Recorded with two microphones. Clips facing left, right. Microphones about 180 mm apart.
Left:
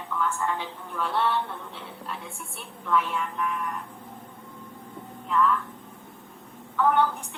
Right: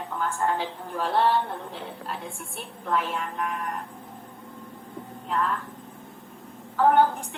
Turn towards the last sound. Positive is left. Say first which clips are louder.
# right 3 dB
turn(degrees=-40)  # may be behind; listen again after turning